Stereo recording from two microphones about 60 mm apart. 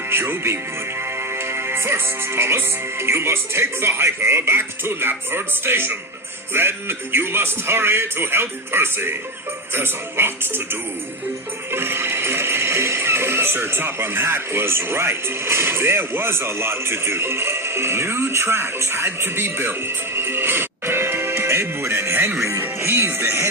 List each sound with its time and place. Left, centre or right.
0.1 s speech: right
22.6 s music: right